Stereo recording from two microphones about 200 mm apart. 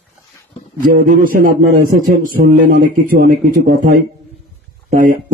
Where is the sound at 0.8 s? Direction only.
45° right (ahead or behind).